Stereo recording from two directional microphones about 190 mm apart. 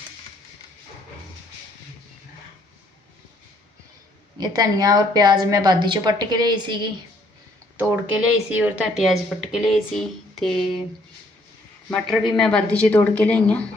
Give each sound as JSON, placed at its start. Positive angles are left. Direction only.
{"t": 4.4, "sound": "a woman's voice", "side_deg": -20}
{"t": 7.8, "sound": "speech", "side_deg": -10}
{"t": 11.9, "sound": "a woman's voice", "side_deg": 0}